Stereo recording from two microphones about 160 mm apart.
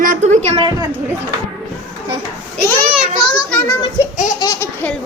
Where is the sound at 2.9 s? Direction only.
Centre (ahead or behind).